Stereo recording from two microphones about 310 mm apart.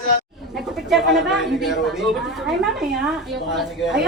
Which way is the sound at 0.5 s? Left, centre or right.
Centre.